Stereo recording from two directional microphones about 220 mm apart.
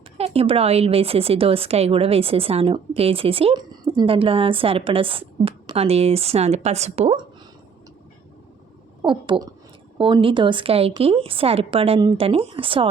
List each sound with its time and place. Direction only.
0.2 s a woman's voice: 25° right (ahead or behind)
9.0 s a woman's voice: 20° right (ahead or behind)